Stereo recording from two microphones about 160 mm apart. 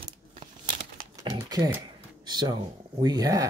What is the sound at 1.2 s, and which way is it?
Typing, 25° right (ahead or behind).